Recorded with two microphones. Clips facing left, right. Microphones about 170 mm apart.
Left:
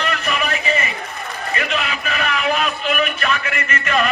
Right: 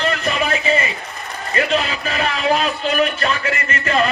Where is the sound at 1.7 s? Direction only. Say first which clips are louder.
Right 3 dB; 35° right (ahead or behind).